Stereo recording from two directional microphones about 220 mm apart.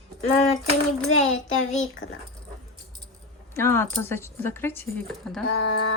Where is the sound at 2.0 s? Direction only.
35° left (ahead or behind).